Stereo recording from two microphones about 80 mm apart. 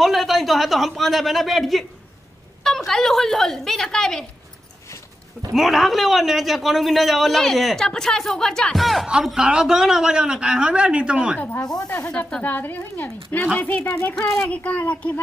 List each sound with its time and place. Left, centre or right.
0.0 s speech: centre
2.9 s a man's voice: centre
5.5 s a man's voice: centre
11.3 s speech: left
14.1 s a man's voice: centre
14.5 s speech: centre